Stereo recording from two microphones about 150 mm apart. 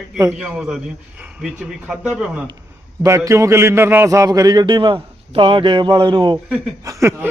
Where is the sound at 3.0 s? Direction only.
20° right (ahead or behind).